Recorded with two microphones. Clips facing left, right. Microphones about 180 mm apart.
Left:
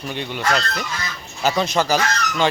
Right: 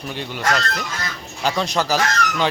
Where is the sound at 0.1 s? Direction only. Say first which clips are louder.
Left 2 dB; centre (ahead or behind).